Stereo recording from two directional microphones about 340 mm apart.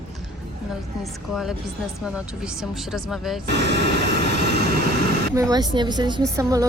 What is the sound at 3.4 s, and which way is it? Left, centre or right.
Speech, right.